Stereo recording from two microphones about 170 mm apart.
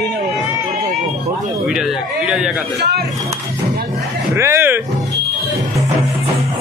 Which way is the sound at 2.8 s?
75° right (ahead or behind).